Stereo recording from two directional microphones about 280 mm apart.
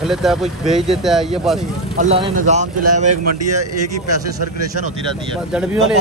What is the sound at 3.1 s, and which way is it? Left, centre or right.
Speech, right.